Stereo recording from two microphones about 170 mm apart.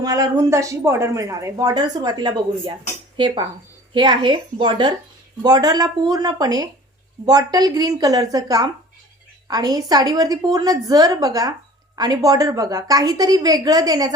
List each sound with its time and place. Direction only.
0.0 s speech: 20° right (ahead or behind)